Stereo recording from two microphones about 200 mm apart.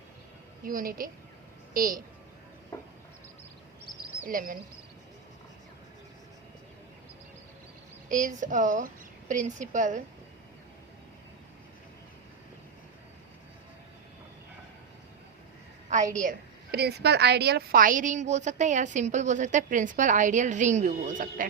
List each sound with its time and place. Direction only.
0.6 s a woman's voice: 45° right (ahead or behind)
4.3 s a woman's voice: 45° right (ahead or behind)
8.1 s a woman's voice: 40° right (ahead or behind)
16.7 s a woman's voice: 55° right (ahead or behind)